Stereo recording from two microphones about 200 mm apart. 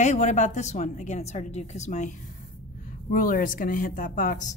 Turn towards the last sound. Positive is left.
turn(degrees=40)  # may be behind; listen again after turning